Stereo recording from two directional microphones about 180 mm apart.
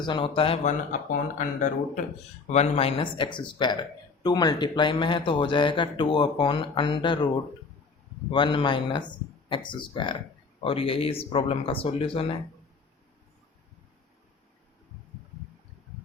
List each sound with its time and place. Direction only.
0.0 s speech: 30° left (ahead or behind)
8.3 s speech: 25° left (ahead or behind)